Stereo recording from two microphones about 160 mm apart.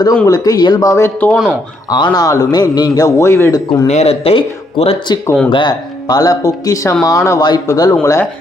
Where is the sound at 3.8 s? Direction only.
40° left (ahead or behind); by 8.3 s 20° left (ahead or behind).